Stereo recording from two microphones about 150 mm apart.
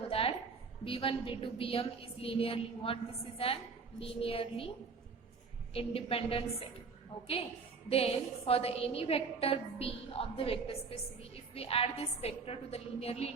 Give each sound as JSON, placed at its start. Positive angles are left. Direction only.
{"t": 0.1, "sound": "a sound", "side_deg": 40}
{"t": 0.9, "sound": "a woman's voice", "side_deg": 35}
{"t": 5.7, "sound": "a woman's voice", "side_deg": 40}
{"t": 7.9, "sound": "a woman's voice", "side_deg": 40}